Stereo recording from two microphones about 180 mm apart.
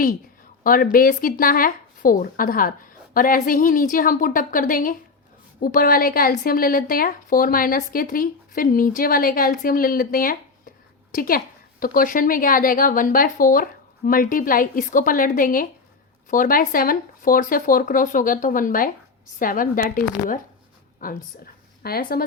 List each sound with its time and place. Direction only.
0.6 s a woman's voice: 50° left (ahead or behind)